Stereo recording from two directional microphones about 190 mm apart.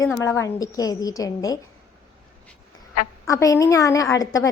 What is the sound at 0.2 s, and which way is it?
A woman's voice, 15° left (ahead or behind).